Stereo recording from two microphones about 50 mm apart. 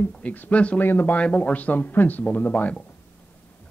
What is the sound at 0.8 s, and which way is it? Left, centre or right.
Speech, left.